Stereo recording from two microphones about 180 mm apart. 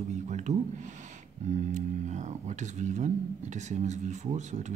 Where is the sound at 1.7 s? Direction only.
40° right (ahead or behind).